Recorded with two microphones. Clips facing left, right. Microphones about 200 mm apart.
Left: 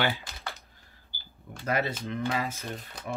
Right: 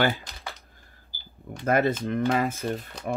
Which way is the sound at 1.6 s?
50° right (ahead or behind).